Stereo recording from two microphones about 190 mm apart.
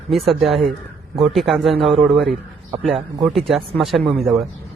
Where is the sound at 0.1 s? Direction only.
Centre (ahead or behind).